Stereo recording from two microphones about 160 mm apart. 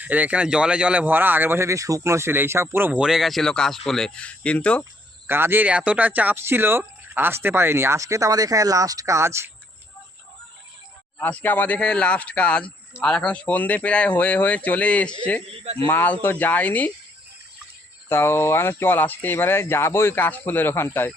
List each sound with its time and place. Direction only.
0.0 s speech: 10° right (ahead or behind); by 4.9 s 10° left (ahead or behind)
5.3 s speech: 15° right (ahead or behind)
11.2 s speech: 10° left (ahead or behind)
15.4 s speech: 40° right (ahead or behind)
15.9 s speech: 10° left (ahead or behind)
18.1 s speech: 15° left (ahead or behind)